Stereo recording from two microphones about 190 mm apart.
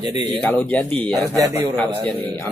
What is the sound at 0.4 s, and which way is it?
Speech, 10° left (ahead or behind).